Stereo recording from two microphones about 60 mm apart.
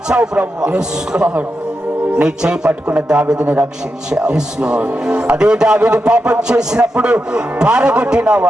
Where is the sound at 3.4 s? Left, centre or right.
Right.